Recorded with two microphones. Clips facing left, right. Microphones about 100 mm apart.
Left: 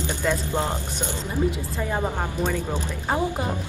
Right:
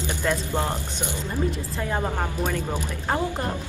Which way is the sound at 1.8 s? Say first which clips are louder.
Even; 5° left (ahead or behind).